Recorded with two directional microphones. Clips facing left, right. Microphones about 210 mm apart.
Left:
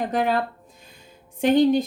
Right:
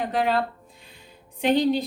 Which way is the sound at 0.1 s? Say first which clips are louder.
Left 1 dB; 45° left (ahead or behind).